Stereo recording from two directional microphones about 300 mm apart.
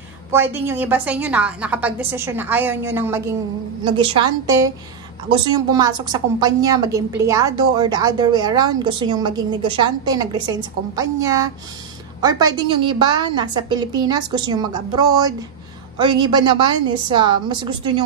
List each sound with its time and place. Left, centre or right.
0.3 s a woman's voice: centre